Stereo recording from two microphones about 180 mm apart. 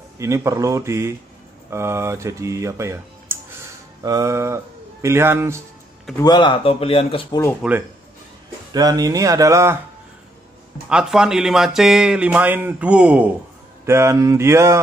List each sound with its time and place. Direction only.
0.2 s speech: 15° right (ahead or behind)
6.2 s speech: 25° left (ahead or behind)
7.6 s speech: 5° right (ahead or behind)
8.7 s speech: 20° right (ahead or behind)
10.9 s speech: 5° right (ahead or behind)